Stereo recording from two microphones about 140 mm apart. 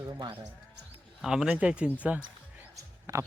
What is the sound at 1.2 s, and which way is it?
Speech, 5° right (ahead or behind).